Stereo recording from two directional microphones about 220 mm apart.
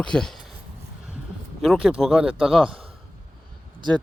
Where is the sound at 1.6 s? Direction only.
Centre (ahead or behind).